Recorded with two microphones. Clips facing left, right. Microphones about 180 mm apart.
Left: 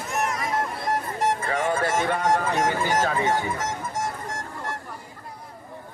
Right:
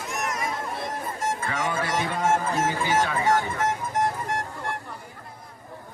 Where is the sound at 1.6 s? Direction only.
50° left (ahead or behind).